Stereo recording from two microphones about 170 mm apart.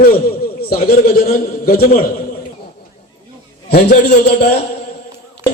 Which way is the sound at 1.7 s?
60° left (ahead or behind).